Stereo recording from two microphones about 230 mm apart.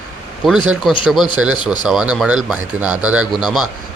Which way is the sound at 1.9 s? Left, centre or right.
Centre.